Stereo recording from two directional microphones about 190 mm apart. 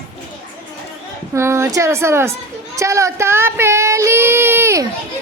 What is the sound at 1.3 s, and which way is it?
Speech, 15° right (ahead or behind).